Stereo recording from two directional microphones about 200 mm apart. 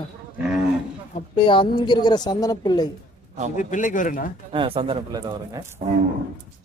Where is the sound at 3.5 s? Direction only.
40° left (ahead or behind).